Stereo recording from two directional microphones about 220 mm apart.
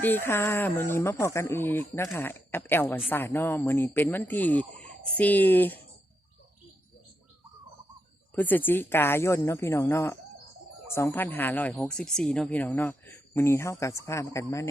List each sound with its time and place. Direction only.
0.0 s speech: 10° left (ahead or behind)
8.4 s speech: 10° left (ahead or behind)